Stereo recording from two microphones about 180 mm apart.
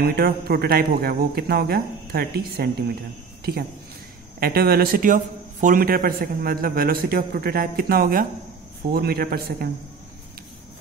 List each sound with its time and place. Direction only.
0.0 s a man's voice: 60° right (ahead or behind)
4.4 s a man's voice: 55° right (ahead or behind)